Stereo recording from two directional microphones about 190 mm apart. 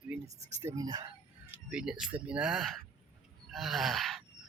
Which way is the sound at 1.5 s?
5° right (ahead or behind).